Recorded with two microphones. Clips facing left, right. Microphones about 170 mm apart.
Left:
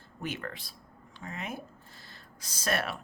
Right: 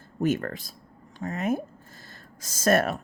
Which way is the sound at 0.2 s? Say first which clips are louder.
Right 12 dB; 45° right (ahead or behind).